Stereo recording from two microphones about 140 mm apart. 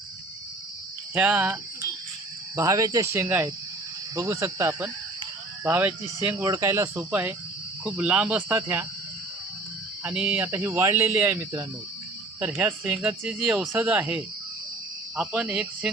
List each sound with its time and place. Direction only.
1.1 s speech: 10° right (ahead or behind)
2.6 s speech: 25° right (ahead or behind)
10.0 s speech: 10° right (ahead or behind)